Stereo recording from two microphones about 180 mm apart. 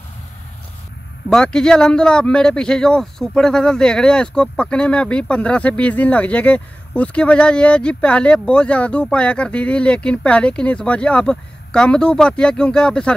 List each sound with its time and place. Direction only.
1.3 s speech: 5° left (ahead or behind)